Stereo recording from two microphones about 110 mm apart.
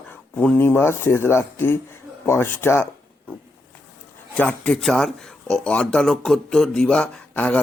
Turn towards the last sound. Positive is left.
turn(degrees=10)  # may be behind; listen again after turning